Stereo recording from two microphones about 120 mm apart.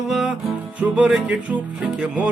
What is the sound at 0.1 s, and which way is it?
Music, centre (ahead or behind).